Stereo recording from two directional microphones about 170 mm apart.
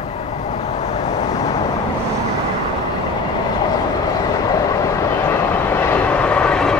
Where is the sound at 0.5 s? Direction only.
40° left (ahead or behind).